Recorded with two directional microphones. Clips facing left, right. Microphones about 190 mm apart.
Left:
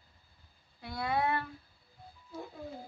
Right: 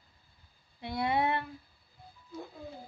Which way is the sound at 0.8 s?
25° right (ahead or behind).